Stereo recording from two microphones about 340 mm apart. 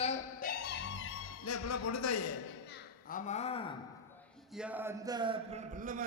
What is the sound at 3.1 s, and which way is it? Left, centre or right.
Speech, left.